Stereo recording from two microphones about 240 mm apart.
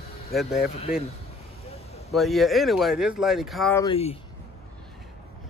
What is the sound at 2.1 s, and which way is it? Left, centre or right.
Speech, centre.